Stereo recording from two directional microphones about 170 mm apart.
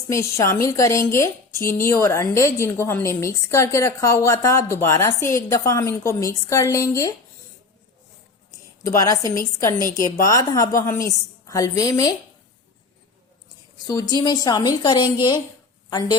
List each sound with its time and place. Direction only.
0.1 s a woman's voice: 15° left (ahead or behind)
9.0 s a woman's voice: 20° left (ahead or behind)
13.8 s a woman's voice: 20° left (ahead or behind)